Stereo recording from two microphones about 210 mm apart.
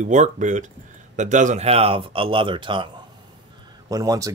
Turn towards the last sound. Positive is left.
turn(degrees=-15)  # may be behind; listen again after turning